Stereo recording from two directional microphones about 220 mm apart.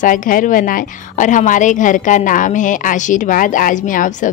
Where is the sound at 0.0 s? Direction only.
35° left (ahead or behind).